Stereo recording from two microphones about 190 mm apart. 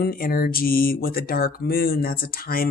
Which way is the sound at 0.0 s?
50° left (ahead or behind).